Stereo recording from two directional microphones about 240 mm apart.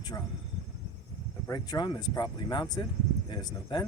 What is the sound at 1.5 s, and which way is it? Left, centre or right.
Speech, centre.